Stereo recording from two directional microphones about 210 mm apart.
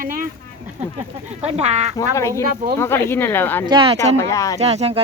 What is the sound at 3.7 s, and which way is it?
Speech, 25° right (ahead or behind).